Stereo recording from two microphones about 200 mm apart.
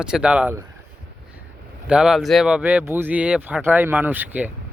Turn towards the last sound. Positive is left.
turn(degrees=-10)  # may be behind; listen again after turning